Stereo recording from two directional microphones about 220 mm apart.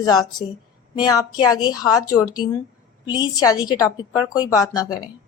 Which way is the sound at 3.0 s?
20° left (ahead or behind).